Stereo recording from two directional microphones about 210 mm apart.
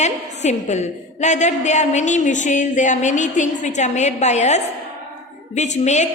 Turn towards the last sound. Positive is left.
turn(degrees=35)  # may be behind; listen again after turning